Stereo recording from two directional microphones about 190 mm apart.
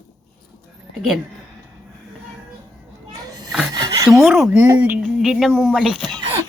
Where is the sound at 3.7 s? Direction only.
20° right (ahead or behind).